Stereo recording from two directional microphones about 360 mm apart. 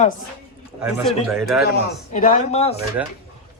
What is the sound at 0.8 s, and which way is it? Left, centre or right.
Speech, centre.